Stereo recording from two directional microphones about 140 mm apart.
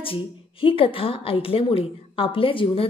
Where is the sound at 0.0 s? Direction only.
40° left (ahead or behind).